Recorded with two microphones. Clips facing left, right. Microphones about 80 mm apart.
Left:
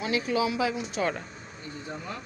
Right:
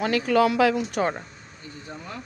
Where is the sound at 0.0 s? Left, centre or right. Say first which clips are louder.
Right 6 dB; right.